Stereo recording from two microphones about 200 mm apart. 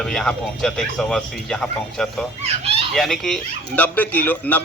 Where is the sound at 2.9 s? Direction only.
Centre (ahead or behind).